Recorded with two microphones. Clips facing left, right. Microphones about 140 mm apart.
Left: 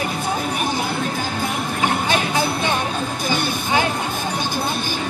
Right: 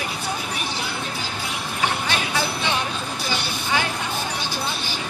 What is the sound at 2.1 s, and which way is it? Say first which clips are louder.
Music: left 5 dB; 50° left (ahead or behind).